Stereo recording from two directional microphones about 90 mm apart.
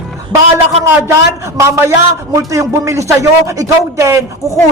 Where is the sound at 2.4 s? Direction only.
35° right (ahead or behind).